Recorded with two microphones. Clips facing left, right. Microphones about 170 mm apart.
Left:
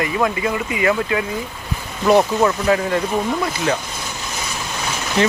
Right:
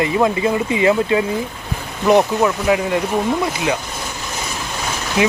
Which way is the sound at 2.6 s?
15° right (ahead or behind).